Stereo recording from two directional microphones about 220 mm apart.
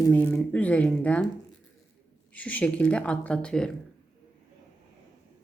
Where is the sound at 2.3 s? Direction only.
5° left (ahead or behind).